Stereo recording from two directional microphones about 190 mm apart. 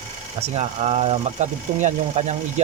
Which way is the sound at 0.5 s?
35° right (ahead or behind).